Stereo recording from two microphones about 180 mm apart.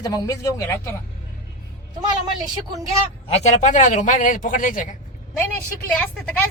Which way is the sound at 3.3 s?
35° left (ahead or behind).